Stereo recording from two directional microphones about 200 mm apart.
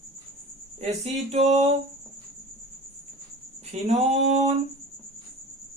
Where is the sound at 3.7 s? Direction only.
35° right (ahead or behind).